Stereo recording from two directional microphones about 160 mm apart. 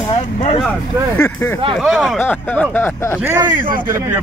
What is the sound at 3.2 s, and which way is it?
Speech, 15° right (ahead or behind).